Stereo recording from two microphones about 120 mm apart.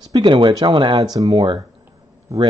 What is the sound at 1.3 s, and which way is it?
Speech, 40° right (ahead or behind).